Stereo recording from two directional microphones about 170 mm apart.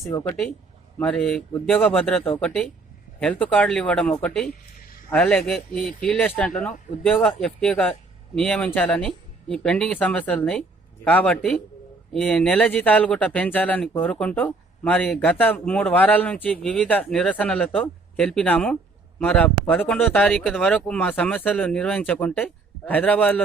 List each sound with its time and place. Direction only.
0.1 s speech: 20° left (ahead or behind)
0.9 s speech: 5° left (ahead or behind)